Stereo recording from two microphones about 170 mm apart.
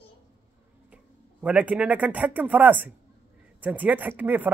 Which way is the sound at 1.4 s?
5° right (ahead or behind).